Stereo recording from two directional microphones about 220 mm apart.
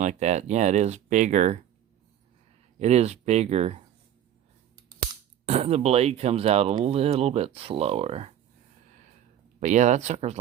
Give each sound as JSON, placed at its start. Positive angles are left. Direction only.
{"t": 0.0, "sound": "speech", "side_deg": -30}
{"t": 2.7, "sound": "speech", "side_deg": -30}
{"t": 5.5, "sound": "speech", "side_deg": -30}
{"t": 9.6, "sound": "speech", "side_deg": -35}